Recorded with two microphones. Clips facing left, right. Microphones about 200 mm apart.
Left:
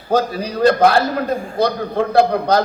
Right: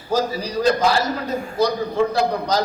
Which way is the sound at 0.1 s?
55° left (ahead or behind).